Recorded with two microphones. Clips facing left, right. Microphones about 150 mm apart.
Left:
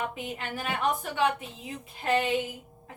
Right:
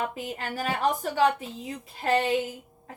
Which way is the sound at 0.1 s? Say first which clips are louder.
Right 2 dB; 40° right (ahead or behind).